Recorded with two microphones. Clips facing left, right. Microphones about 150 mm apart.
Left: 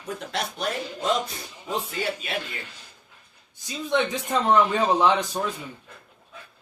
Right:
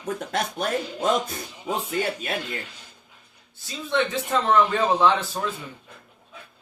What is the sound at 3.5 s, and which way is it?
A man's voice, 15° left (ahead or behind).